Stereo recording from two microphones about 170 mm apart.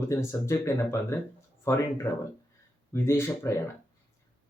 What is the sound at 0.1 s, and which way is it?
Speech, 15° left (ahead or behind).